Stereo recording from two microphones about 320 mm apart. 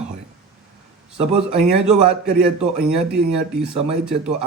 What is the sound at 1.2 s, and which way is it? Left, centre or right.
Speech, centre.